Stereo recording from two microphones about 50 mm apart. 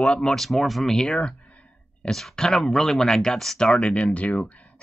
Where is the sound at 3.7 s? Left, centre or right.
Left.